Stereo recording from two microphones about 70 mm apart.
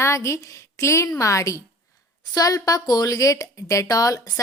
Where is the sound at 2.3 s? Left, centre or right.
Left.